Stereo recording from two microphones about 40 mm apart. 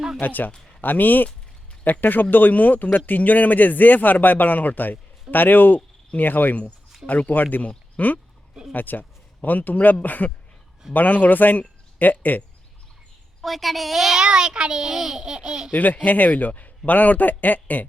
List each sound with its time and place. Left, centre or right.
0.2 s a man's voice: left
13.4 s a child's voice: centre
14.2 s a child's voice: centre
15.2 s a child's voice: right
15.7 s a man's voice: left